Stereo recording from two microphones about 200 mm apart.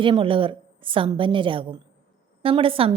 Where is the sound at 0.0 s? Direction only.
25° right (ahead or behind).